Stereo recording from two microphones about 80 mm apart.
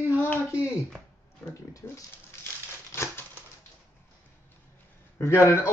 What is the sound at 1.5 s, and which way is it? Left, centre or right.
Speech, left.